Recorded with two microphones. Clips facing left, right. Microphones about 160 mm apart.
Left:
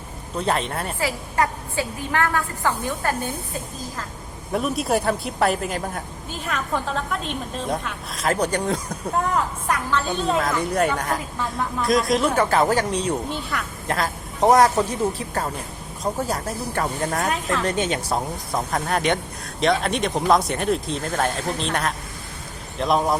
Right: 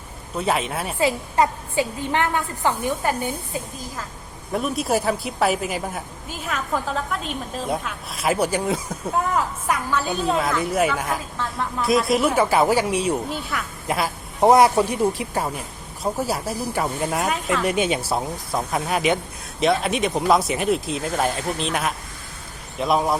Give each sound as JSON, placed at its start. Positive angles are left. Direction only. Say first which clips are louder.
{"t": 0.3, "sound": "a woman's voice", "louder": "right 1 dB", "side_deg": -5}
{"t": 0.9, "sound": "speech", "louder": "right 5 dB", "side_deg": -20}
{"t": 4.5, "sound": "a woman's voice", "louder": "even", "side_deg": 0}